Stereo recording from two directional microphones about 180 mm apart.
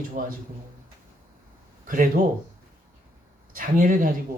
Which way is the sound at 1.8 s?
50° right (ahead or behind).